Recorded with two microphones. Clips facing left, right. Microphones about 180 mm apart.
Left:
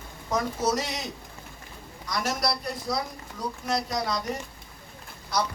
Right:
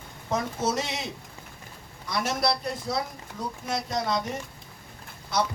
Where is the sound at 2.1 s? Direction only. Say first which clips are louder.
Right 2 dB; 25° right (ahead or behind).